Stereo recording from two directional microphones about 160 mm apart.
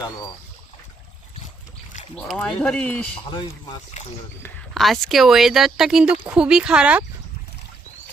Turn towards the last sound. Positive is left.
turn(degrees=-5)  # may be behind; listen again after turning